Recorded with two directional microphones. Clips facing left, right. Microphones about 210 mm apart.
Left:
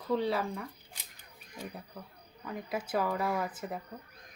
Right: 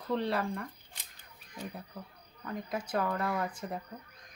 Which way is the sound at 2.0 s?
Centre (ahead or behind).